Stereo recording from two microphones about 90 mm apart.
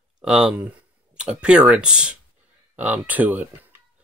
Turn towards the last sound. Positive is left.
turn(degrees=-20)  # may be behind; listen again after turning